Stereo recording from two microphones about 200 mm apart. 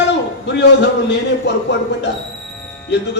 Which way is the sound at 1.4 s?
60° left (ahead or behind).